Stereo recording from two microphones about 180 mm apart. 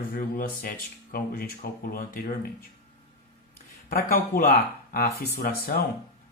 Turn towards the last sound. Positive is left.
turn(degrees=55)  # may be behind; listen again after turning